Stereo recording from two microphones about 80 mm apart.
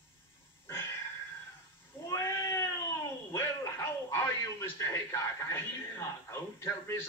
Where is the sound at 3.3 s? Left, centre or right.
Left.